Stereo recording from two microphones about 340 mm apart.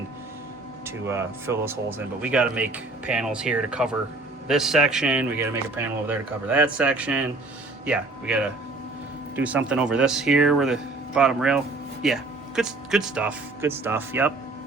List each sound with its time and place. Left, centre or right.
0.9 s speech: centre